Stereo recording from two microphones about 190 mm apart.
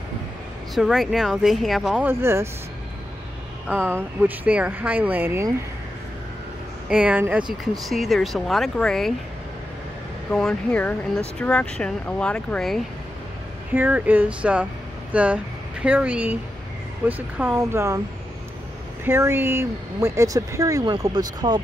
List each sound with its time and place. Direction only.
0.7 s speech: centre (ahead or behind)
2.0 s speech: 15° right (ahead or behind)
3.6 s speech: 10° right (ahead or behind)
6.9 s speech: 5° right (ahead or behind)
10.3 s speech: 5° left (ahead or behind)
13.7 s speech: 10° right (ahead or behind)
19.0 s speech: 10° right (ahead or behind)